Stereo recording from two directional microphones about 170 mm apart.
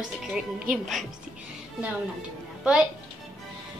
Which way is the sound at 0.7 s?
55° right (ahead or behind).